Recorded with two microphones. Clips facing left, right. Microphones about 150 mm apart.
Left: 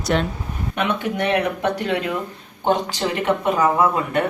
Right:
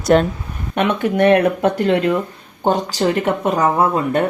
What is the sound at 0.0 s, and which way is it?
Speech, 45° right (ahead or behind).